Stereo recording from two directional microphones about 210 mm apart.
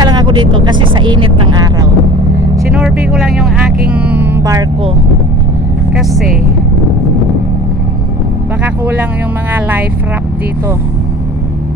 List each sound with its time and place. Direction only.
0.0 s speech: 20° right (ahead or behind)
2.7 s speech: centre (ahead or behind)
5.9 s speech: centre (ahead or behind)
9.5 s music: 10° right (ahead or behind)